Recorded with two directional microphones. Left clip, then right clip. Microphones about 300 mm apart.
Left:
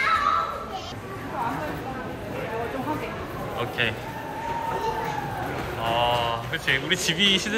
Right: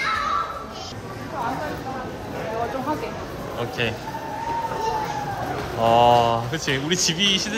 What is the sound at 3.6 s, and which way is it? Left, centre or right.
Speech, centre.